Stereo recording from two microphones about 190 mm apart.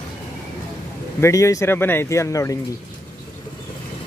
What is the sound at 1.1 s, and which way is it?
Speech, 15° left (ahead or behind).